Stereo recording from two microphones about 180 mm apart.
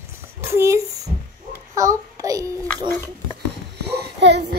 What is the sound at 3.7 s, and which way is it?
Babbling, 65° right (ahead or behind).